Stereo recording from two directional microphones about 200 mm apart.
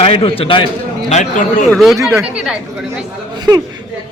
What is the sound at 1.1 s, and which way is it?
Speech, 40° left (ahead or behind).